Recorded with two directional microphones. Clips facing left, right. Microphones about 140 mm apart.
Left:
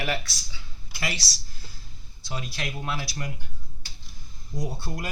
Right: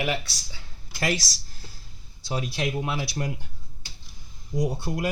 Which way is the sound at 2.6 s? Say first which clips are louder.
Right 4 dB; 20° right (ahead or behind).